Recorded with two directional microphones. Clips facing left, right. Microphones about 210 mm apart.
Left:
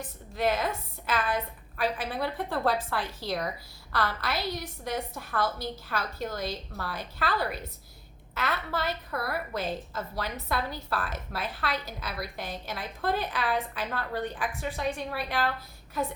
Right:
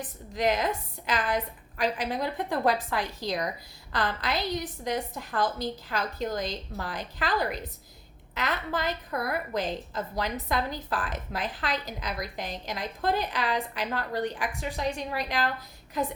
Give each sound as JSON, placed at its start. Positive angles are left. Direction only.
{"t": 0.3, "sound": "a woman's voice", "side_deg": -15}
{"t": 9.1, "sound": "a woman's voice", "side_deg": -20}